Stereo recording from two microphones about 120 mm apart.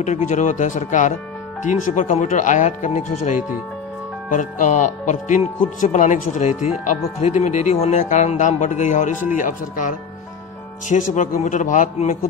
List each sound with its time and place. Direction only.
0.0 s speech: 90° left
7.2 s speech: 75° left (ahead or behind); by 12.2 s 90° left